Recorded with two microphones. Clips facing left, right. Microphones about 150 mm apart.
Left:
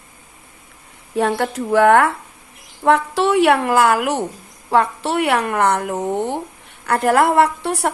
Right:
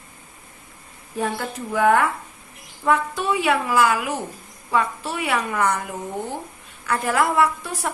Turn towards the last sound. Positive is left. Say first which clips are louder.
# left 5 dB
turn(degrees=75)  # may be behind; listen again after turning